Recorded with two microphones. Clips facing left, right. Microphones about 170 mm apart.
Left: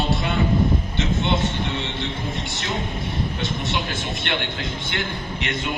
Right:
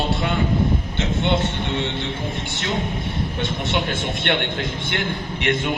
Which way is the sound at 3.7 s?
55° right (ahead or behind).